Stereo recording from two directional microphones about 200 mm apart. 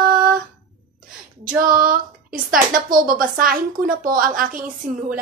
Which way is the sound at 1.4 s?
45° right (ahead or behind).